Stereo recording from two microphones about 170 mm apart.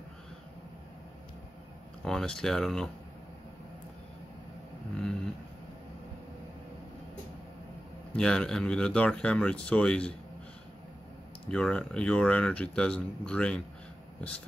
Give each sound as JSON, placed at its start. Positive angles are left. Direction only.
{"t": 2.0, "sound": "speech", "side_deg": 5}
{"t": 4.9, "sound": "a sound", "side_deg": 5}
{"t": 8.2, "sound": "speech", "side_deg": 5}
{"t": 11.5, "sound": "speech", "side_deg": 5}